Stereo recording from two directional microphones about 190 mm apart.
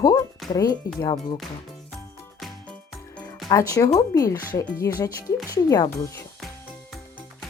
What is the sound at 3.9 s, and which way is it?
Speech, 15° left (ahead or behind).